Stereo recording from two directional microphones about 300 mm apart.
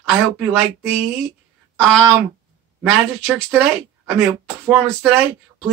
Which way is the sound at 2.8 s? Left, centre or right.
Centre.